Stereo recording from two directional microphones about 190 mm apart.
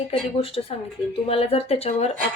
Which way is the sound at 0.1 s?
30° left (ahead or behind).